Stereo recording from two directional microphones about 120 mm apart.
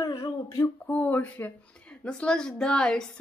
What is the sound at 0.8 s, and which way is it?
A woman's voice, 15° left (ahead or behind).